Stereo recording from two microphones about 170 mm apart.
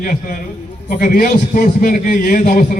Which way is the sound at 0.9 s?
55° left (ahead or behind).